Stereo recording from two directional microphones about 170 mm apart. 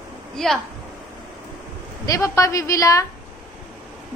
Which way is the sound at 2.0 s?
20° left (ahead or behind).